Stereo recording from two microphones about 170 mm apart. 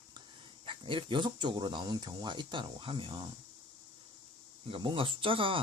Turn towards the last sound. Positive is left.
turn(degrees=-30)  # may be behind; listen again after turning